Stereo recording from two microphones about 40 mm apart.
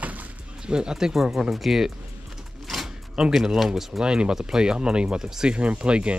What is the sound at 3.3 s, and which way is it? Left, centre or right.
Speech, centre.